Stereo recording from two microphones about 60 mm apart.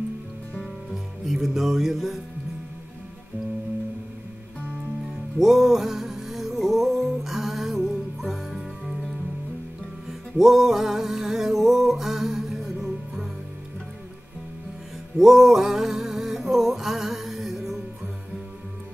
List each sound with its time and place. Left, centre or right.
1.2 s music: centre
5.4 s music: centre
10.3 s music: centre
15.1 s music: centre